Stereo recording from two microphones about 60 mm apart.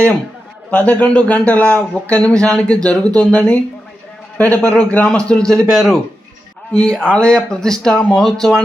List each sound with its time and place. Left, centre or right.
0.7 s a man's voice: left; by 6.0 s centre
6.7 s speech: centre